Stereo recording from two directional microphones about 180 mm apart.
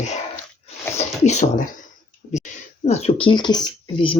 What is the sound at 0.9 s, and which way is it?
Speech, 40° left (ahead or behind).